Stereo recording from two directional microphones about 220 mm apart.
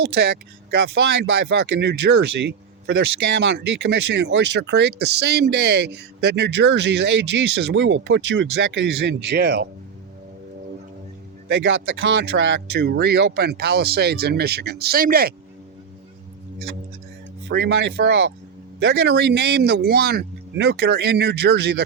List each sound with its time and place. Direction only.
0.7 s speech: 50° right (ahead or behind)
2.4 s a sound: 50° right (ahead or behind)
3.4 s speech: 50° right (ahead or behind)
11.4 s speech: 55° right (ahead or behind)
17.5 s speech: 50° right (ahead or behind)